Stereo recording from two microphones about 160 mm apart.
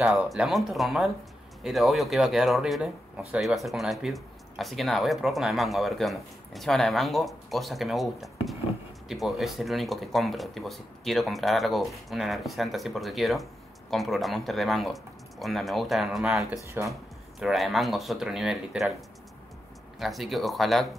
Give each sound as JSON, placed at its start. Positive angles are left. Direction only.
{"t": 0.0, "sound": "speech", "side_deg": -5}
{"t": 16.8, "sound": "speech", "side_deg": -15}
{"t": 17.4, "sound": "speech", "side_deg": 0}